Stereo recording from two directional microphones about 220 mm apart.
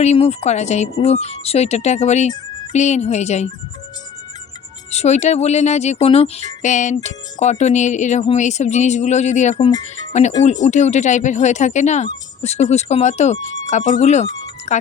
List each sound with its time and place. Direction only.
0.0 s speech: 30° left (ahead or behind)
4.9 s speech: 30° left (ahead or behind)